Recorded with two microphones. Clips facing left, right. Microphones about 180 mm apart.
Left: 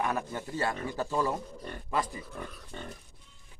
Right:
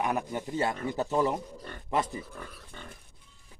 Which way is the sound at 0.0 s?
15° right (ahead or behind).